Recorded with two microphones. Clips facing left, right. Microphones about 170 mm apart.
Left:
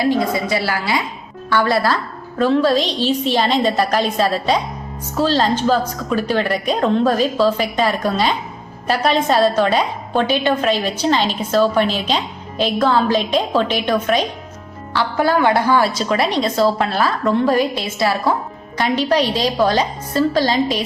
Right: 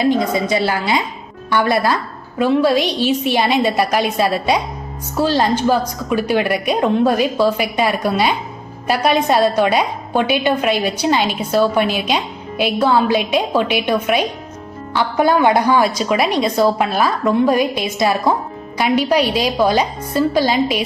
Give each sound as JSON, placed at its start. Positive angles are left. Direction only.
{"t": 0.0, "sound": "a woman's voice", "side_deg": -20}